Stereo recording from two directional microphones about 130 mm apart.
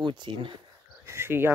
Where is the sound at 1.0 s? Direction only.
20° right (ahead or behind).